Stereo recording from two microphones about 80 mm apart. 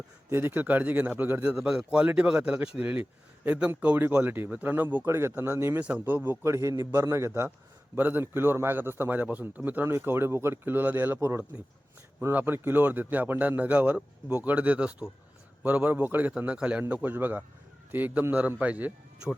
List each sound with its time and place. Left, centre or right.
0.3 s a man's voice: right
1.5 s a man's voice: centre; by 7.3 s right
7.9 s a man's voice: right